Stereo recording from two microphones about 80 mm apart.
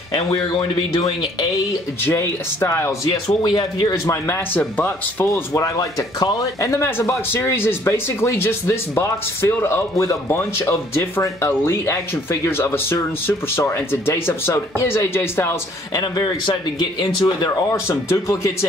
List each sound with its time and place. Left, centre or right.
0.5 s speech: left
2.0 s speech: left
3.1 s speech: left
3.9 s speech: left
4.6 s speech: left
5.2 s speech: left
6.6 s speech: left
15.9 s a man's voice: left
17.6 s speech: left